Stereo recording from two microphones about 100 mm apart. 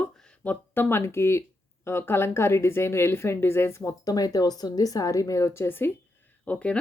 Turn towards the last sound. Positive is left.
turn(degrees=10)  # may be behind; listen again after turning